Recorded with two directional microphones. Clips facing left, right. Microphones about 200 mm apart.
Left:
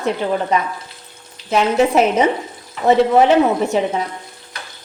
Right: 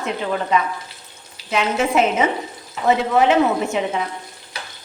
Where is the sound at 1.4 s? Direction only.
40° left (ahead or behind).